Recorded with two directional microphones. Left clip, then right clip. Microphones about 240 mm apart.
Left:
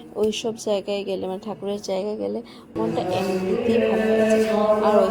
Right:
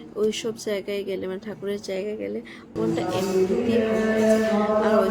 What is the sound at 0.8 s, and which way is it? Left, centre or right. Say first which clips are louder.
Speech: left 2 dB; centre.